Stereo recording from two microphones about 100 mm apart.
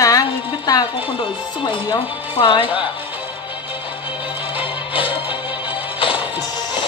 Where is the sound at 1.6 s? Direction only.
50° left (ahead or behind).